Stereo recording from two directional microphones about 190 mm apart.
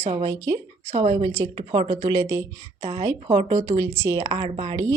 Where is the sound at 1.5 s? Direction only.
25° right (ahead or behind).